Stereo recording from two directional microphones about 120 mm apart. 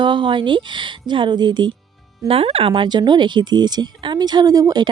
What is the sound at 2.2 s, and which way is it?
Speech, 50° right (ahead or behind).